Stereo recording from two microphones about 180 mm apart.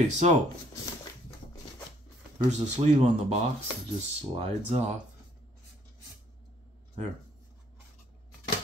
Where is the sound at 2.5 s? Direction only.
40° right (ahead or behind).